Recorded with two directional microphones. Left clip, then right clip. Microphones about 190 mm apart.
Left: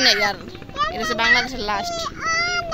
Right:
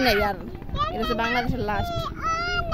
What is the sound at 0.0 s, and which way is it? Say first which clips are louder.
Speech: left 4 dB; 35° right (ahead or behind).